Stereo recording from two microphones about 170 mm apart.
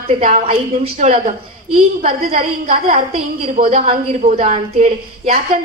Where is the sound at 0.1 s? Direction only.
40° right (ahead or behind).